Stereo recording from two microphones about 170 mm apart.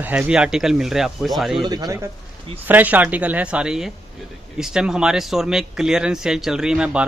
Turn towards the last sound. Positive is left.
turn(degrees=-5)  # may be behind; listen again after turning